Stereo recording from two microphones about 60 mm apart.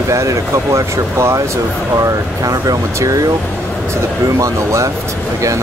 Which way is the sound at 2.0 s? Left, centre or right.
Right.